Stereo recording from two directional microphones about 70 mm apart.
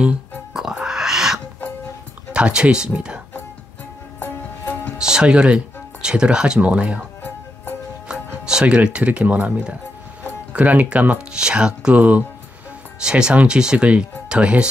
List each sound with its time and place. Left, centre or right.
0.0 s music: centre
0.8 s a sound: centre
2.3 s speech: centre
4.2 s music: left
4.9 s speech: centre
8.1 s speech: centre